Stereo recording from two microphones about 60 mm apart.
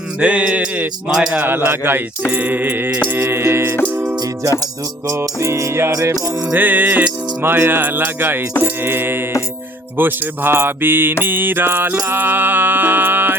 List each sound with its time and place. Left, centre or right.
0.2 s music: right
1.1 s a man's voice: centre
1.5 s speech: right
4.0 s music: right
5.0 s music: right
6.5 s speech: right